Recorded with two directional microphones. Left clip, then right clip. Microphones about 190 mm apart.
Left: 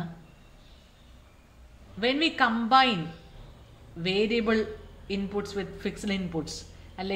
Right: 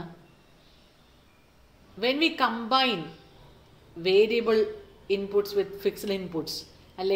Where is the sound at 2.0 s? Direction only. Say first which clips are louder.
Even; 40° right (ahead or behind).